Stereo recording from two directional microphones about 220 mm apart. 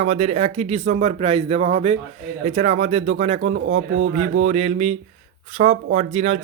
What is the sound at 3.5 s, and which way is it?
Speech, 65° right (ahead or behind).